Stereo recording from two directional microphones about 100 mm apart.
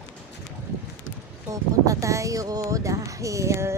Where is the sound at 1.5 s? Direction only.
35° right (ahead or behind).